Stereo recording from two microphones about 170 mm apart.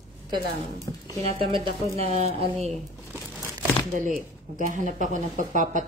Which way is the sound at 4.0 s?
50° right (ahead or behind).